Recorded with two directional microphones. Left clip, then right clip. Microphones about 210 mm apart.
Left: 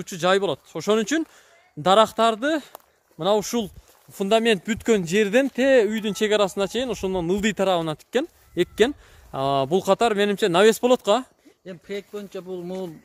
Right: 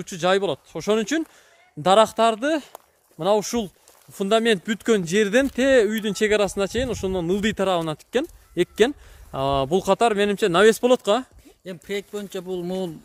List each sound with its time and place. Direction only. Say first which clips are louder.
0.0 s speech: even; centre (ahead or behind)
11.6 s speech: right 3 dB; 50° right (ahead or behind)